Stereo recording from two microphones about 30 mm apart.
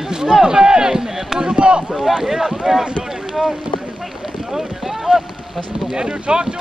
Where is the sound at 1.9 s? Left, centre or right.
Centre.